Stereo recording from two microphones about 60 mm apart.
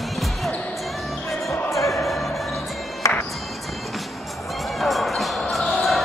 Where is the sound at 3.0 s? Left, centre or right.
Left.